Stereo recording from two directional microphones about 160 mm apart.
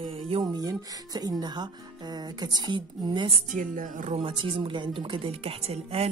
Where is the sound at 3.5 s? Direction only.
55° right (ahead or behind).